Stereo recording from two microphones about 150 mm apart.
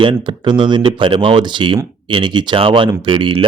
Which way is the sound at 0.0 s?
35° right (ahead or behind).